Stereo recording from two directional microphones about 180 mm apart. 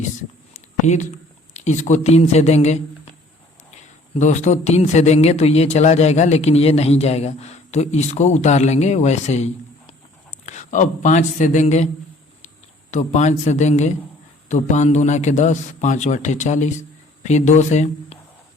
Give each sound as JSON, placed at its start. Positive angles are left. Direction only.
{"t": 0.5, "sound": "a sound", "side_deg": 40}
{"t": 1.5, "sound": "a man's voice", "side_deg": 40}
{"t": 3.8, "sound": "a man's voice", "side_deg": 40}
{"t": 12.9, "sound": "a man's voice", "side_deg": 40}